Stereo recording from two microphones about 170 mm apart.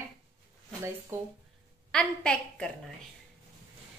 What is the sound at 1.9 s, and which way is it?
Speech, 5° left (ahead or behind).